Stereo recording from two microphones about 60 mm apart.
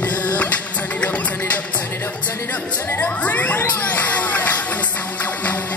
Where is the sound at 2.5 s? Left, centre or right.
Left.